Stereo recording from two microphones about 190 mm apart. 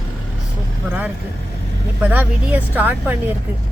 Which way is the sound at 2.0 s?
10° right (ahead or behind).